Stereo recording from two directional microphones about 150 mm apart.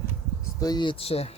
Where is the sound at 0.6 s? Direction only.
30° left (ahead or behind).